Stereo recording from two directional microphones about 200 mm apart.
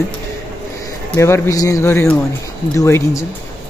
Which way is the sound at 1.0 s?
15° left (ahead or behind).